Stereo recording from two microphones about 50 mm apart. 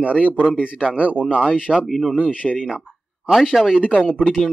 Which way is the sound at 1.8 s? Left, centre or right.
Centre.